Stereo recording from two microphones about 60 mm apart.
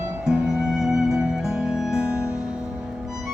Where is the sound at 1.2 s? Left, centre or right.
Centre.